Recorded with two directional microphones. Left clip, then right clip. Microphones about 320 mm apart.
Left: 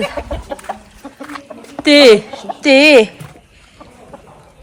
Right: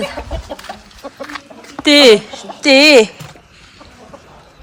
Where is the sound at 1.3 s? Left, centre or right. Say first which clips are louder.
Even; centre.